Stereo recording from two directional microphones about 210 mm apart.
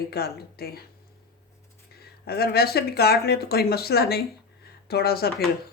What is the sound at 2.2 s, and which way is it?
Speech, 50° left (ahead or behind).